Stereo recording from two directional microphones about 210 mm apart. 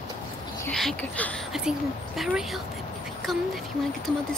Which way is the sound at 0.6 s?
5° left (ahead or behind).